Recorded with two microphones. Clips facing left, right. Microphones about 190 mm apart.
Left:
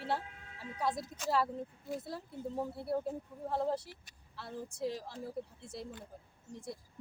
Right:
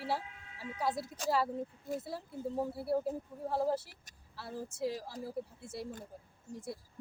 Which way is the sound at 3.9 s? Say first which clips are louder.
Left 6 dB; 45° right (ahead or behind).